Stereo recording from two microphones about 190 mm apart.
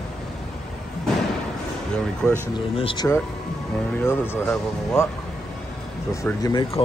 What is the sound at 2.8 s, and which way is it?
Speech, 25° left (ahead or behind).